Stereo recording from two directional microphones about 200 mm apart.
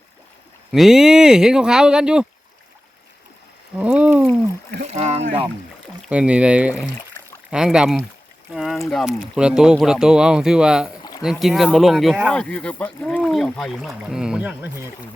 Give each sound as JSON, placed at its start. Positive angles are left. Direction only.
{"t": 0.7, "sound": "speech", "side_deg": 0}
{"t": 3.8, "sound": "a sound", "side_deg": -5}
{"t": 4.9, "sound": "speech", "side_deg": -30}
{"t": 6.1, "sound": "speech", "side_deg": -5}